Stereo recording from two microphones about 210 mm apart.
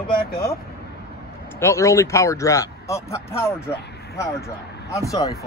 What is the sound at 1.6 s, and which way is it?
Speech, 15° left (ahead or behind).